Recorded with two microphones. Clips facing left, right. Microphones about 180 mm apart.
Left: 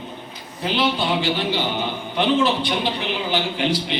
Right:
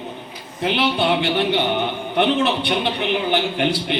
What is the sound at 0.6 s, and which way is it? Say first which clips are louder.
A man's voice: right 2 dB; 65° right (ahead or behind).